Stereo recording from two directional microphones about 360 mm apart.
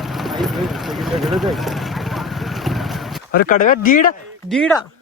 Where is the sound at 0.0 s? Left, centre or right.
Centre.